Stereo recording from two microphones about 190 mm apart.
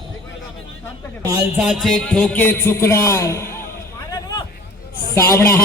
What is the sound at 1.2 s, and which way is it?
Speech, 15° right (ahead or behind).